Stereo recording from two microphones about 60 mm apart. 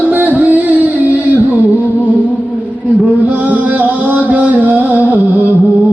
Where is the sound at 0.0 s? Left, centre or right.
Right.